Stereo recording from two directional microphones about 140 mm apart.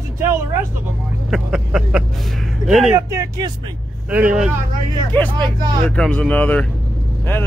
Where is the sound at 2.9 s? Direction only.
20° right (ahead or behind).